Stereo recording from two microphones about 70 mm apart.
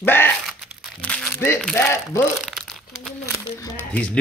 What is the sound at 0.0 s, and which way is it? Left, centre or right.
Speech, left.